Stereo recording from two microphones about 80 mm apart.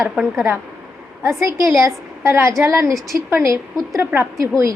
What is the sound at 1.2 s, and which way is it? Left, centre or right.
A woman's voice, right.